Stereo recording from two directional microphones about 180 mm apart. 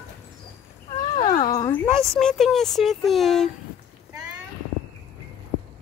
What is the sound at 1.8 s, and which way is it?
Speech, 15° right (ahead or behind).